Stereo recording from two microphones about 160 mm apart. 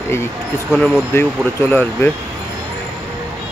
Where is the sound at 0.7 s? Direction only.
5° left (ahead or behind).